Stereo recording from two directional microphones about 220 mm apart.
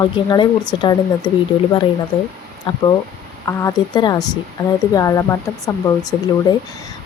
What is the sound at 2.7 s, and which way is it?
A woman's voice, 25° left (ahead or behind).